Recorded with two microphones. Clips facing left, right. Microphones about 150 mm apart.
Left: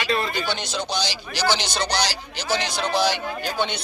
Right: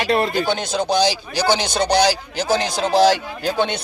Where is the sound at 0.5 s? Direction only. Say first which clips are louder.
Right 8 dB; 50° right (ahead or behind).